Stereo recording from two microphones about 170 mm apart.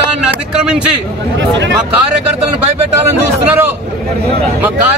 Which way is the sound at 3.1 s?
10° right (ahead or behind).